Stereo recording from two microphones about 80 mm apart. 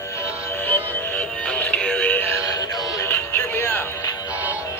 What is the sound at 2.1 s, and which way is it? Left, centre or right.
Synthetic singing, left.